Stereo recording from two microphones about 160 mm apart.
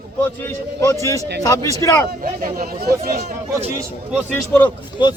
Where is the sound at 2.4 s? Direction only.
60° right (ahead or behind).